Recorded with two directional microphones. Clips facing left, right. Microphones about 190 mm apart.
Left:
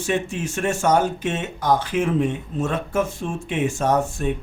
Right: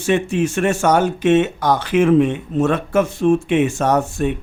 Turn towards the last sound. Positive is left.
turn(degrees=-75)  # may be behind; listen again after turning